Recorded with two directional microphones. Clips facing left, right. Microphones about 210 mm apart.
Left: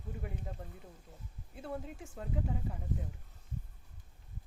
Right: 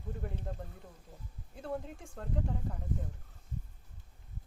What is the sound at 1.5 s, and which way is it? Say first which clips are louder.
Speech: right 2 dB; 5° left (ahead or behind).